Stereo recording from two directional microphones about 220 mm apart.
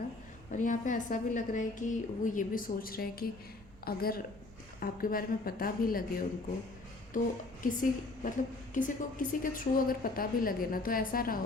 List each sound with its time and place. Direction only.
0.5 s a woman's voice: 35° left (ahead or behind)